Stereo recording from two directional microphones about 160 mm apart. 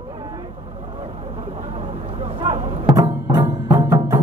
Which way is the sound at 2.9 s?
25° right (ahead or behind).